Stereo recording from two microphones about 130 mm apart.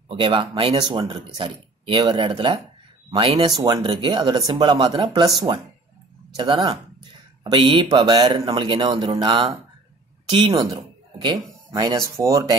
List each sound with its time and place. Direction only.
0.1 s speech: 40° right (ahead or behind)
11.2 s speech: 30° right (ahead or behind)